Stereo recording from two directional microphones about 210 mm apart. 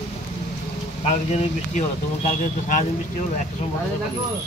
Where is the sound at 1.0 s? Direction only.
35° left (ahead or behind).